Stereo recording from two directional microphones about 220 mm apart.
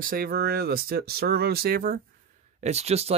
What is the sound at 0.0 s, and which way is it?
Speech, 40° right (ahead or behind).